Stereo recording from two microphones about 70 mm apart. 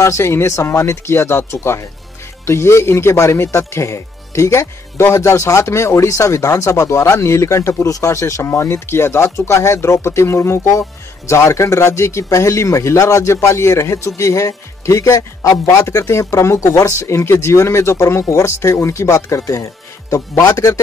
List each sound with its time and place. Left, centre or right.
0.0 s speech: left
10.6 s speech: left
17.0 s speech: left